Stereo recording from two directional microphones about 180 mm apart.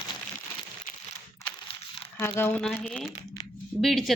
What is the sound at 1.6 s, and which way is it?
Crumpling, 30° left (ahead or behind).